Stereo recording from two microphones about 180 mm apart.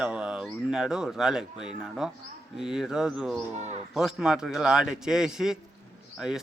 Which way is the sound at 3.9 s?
5° right (ahead or behind).